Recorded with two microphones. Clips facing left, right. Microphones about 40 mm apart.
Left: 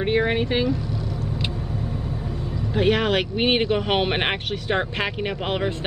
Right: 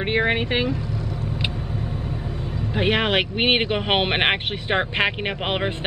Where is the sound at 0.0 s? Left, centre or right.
Right.